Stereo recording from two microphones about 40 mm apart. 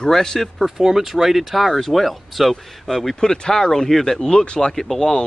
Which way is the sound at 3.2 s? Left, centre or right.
Centre.